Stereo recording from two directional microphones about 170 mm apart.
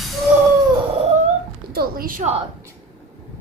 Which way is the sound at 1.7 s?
60° right (ahead or behind).